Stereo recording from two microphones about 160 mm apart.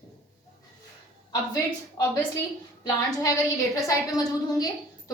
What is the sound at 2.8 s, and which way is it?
A woman's voice, 20° left (ahead or behind).